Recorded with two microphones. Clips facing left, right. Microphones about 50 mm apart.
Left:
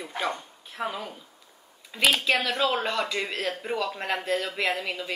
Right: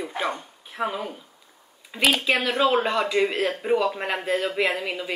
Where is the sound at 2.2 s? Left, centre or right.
Centre.